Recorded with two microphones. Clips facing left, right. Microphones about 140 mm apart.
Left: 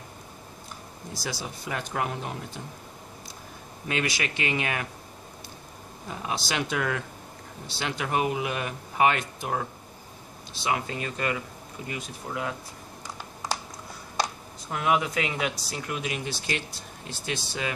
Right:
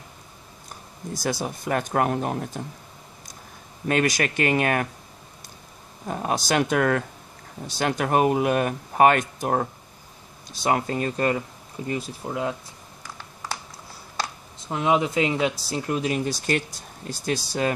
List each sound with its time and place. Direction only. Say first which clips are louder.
1.1 s speech: right 8 dB; 50° right (ahead or behind)
3.8 s speech: right 7 dB; 45° right (ahead or behind)
6.0 s speech: right 7 dB; 50° right (ahead or behind)
11.9 s speech: right 6 dB; 30° right (ahead or behind)
14.7 s speech: right 4 dB; 25° right (ahead or behind); by 17.7 s 40° right (ahead or behind)